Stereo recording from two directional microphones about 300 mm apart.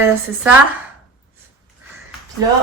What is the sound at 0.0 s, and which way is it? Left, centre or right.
Speech, centre.